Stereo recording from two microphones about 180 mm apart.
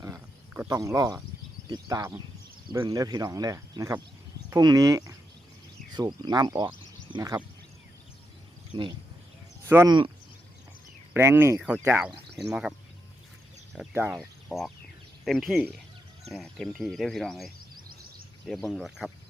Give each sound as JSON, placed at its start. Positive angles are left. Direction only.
{"t": 0.0, "sound": "a sound", "side_deg": -15}
{"t": 1.7, "sound": "speech", "side_deg": -20}
{"t": 8.7, "sound": "speech", "side_deg": -25}
{"t": 9.6, "sound": "speech", "side_deg": -15}
{"t": 11.1, "sound": "speech", "side_deg": -15}
{"t": 13.9, "sound": "speech", "side_deg": -10}
{"t": 14.2, "sound": "speech", "side_deg": 0}